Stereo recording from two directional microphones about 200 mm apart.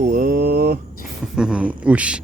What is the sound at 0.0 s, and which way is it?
Mantra, 45° right (ahead or behind).